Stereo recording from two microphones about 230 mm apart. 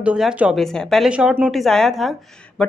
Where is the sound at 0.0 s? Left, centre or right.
Centre.